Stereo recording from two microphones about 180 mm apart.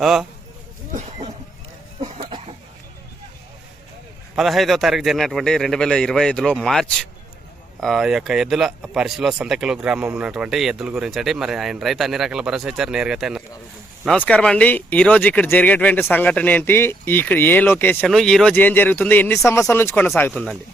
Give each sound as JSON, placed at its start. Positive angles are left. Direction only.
{"t": 0.0, "sound": "speech", "side_deg": 0}
{"t": 2.0, "sound": "a sound", "side_deg": -35}
{"t": 4.4, "sound": "speech", "side_deg": 0}